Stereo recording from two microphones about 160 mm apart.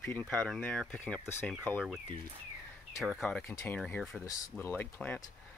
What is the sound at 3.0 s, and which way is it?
Speech, centre (ahead or behind).